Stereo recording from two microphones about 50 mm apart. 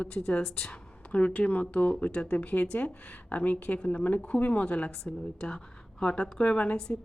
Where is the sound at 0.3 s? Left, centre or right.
Centre.